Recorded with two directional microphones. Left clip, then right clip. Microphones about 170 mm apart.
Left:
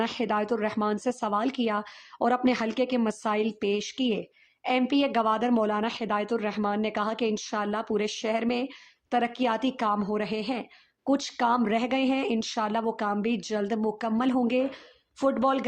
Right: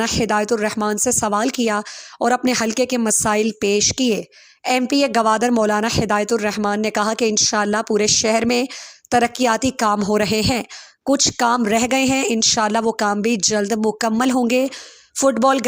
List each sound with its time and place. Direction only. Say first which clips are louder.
0.0 s a woman's voice: right 9 dB; 35° right (ahead or behind)
11.0 s a woman's voice: right 9 dB; 30° right (ahead or behind)